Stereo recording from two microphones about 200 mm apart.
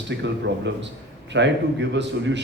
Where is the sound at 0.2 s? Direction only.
65° right (ahead or behind).